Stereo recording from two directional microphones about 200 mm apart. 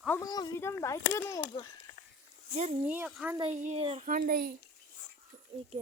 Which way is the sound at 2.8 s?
10° right (ahead or behind).